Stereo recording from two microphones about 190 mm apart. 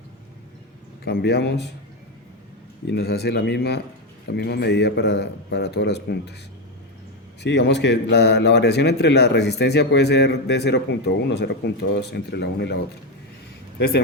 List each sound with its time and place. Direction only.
1.0 s speech: 60° left (ahead or behind)
2.8 s speech: 60° left (ahead or behind)
7.4 s a man's voice: 65° left (ahead or behind)